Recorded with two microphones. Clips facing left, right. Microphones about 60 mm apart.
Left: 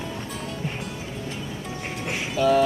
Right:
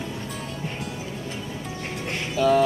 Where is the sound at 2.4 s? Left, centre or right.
Centre.